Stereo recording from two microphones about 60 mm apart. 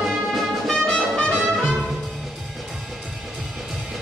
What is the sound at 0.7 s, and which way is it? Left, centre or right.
Music, centre.